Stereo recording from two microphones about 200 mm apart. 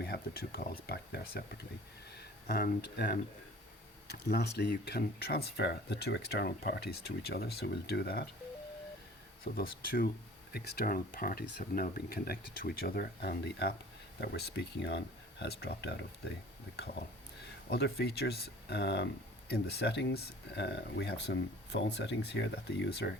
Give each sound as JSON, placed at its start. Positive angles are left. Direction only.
{"t": 0.0, "sound": "speech", "side_deg": 50}
{"t": 9.4, "sound": "speech", "side_deg": 50}